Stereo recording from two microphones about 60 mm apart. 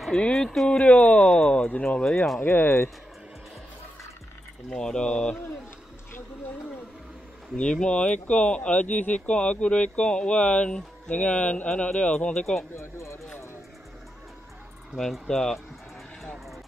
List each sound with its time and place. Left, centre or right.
0.2 s speech: centre
2.4 s speech: left
4.6 s speech: centre
7.5 s speech: centre
12.7 s speech: left
15.0 s speech: centre